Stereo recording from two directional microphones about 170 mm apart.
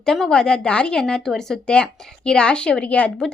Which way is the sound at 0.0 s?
5° left (ahead or behind).